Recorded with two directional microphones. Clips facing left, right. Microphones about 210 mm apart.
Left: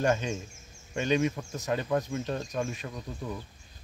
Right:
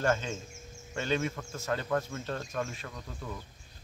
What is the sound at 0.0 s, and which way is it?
Speech, 15° left (ahead or behind).